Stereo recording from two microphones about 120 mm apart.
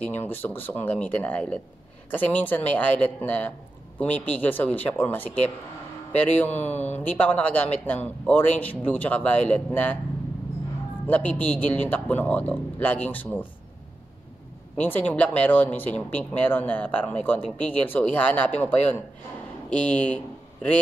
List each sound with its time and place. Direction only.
0.0 s a man's voice: 15° left (ahead or behind)
6.3 s a man's voice: 15° left (ahead or behind)
11.1 s a man's voice: 10° left (ahead or behind)
14.8 s a man's voice: 15° left (ahead or behind)